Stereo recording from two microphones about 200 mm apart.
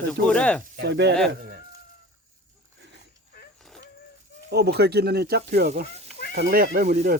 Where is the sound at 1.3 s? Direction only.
45° right (ahead or behind).